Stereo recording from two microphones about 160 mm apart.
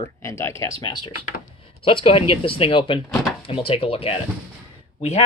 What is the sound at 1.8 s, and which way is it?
Speech, 35° left (ahead or behind).